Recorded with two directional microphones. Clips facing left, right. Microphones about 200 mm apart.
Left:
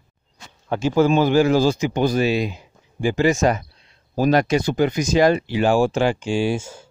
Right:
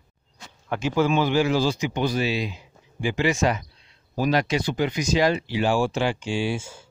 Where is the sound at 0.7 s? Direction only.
35° left (ahead or behind).